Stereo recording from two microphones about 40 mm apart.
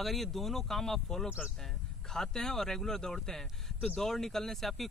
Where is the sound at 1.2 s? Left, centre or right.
Right.